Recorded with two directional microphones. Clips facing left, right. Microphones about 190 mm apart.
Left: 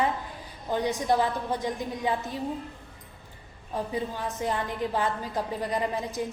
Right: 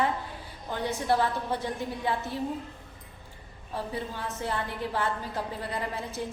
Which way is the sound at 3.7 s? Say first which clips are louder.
Left 3 dB; 15° left (ahead or behind).